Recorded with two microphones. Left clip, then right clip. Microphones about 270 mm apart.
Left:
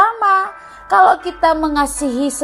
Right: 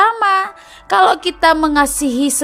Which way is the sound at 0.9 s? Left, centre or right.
Right.